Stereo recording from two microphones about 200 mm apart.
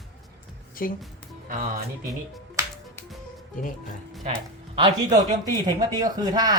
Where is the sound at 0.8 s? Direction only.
45° left (ahead or behind).